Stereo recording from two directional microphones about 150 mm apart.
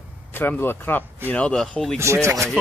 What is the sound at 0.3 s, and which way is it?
Speech, 15° left (ahead or behind).